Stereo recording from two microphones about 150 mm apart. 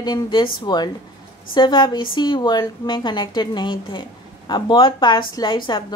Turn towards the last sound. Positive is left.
turn(degrees=30)  # may be behind; listen again after turning